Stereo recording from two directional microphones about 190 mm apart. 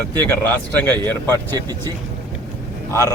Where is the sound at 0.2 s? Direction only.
10° left (ahead or behind).